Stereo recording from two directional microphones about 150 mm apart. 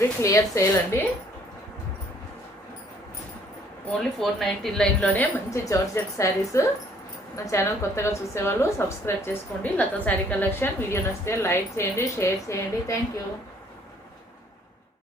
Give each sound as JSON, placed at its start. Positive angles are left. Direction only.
{"t": 0.0, "sound": "a woman's voice", "side_deg": 20}
{"t": 4.2, "sound": "speech", "side_deg": 0}
{"t": 5.5, "sound": "a woman's voice", "side_deg": 20}